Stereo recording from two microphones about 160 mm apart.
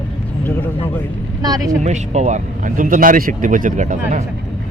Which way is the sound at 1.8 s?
45° right (ahead or behind).